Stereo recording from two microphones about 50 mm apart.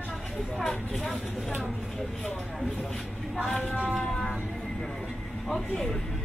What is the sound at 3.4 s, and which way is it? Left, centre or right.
Speech, left.